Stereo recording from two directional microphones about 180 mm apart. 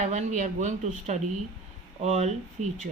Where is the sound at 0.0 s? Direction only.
40° right (ahead or behind).